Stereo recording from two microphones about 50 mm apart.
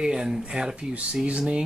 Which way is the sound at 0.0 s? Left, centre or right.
Centre.